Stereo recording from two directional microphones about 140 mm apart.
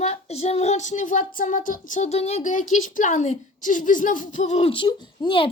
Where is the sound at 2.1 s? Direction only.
50° left (ahead or behind).